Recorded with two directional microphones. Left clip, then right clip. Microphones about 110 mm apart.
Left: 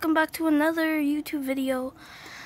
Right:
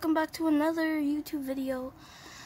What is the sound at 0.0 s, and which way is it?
Speech, 15° left (ahead or behind).